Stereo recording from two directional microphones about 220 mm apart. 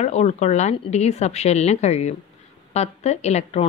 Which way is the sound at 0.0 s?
30° left (ahead or behind).